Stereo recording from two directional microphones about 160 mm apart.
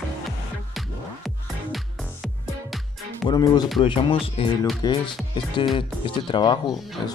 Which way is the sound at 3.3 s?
25° left (ahead or behind).